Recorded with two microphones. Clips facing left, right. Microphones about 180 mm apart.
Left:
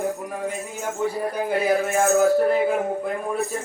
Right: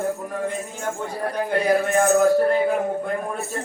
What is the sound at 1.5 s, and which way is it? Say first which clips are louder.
Music: right 2 dB; 5° left (ahead or behind).